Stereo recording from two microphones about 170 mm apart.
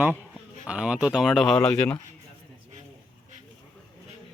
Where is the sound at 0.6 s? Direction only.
5° right (ahead or behind).